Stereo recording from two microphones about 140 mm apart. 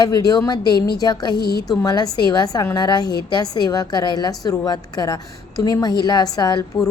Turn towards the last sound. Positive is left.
turn(degrees=30)  # may be behind; listen again after turning